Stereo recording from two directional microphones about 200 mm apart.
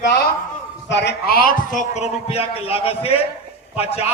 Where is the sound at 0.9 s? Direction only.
60° left (ahead or behind).